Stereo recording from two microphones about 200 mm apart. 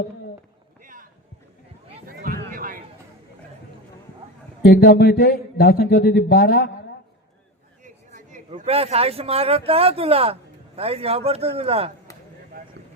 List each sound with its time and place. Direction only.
2.0 s a sound: 45° right (ahead or behind)
4.6 s speech: 50° left (ahead or behind)
7.9 s a man's voice: 40° right (ahead or behind)